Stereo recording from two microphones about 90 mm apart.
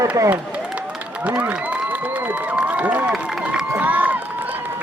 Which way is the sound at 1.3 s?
15° right (ahead or behind).